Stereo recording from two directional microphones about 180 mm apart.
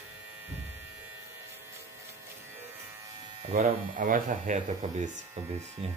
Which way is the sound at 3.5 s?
50° right (ahead or behind).